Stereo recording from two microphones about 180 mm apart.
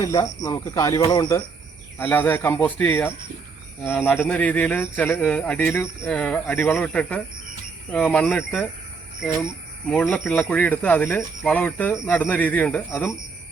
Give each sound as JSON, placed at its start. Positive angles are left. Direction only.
{"t": 0.0, "sound": "speech", "side_deg": 20}
{"t": 2.0, "sound": "speech", "side_deg": 10}
{"t": 9.9, "sound": "speech", "side_deg": 0}